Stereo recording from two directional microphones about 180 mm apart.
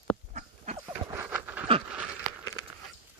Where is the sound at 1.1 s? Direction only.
10° right (ahead or behind).